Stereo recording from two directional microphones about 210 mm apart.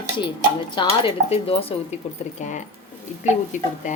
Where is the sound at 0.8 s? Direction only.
25° left (ahead or behind).